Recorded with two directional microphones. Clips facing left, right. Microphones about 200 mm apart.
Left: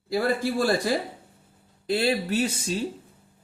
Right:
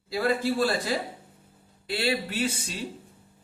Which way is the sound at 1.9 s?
40° left (ahead or behind).